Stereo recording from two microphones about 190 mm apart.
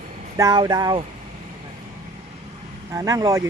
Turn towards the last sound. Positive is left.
turn(degrees=-20)  # may be behind; listen again after turning